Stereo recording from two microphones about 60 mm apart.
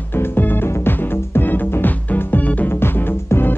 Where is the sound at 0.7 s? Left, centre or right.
Left.